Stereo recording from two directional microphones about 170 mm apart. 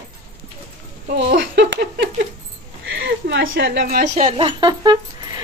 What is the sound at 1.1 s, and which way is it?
Speech, 90° right.